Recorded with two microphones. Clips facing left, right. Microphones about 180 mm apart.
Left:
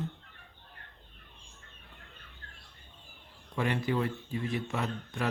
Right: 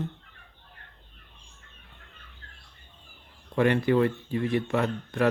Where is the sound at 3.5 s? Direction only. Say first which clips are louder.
Right 8 dB; 60° right (ahead or behind).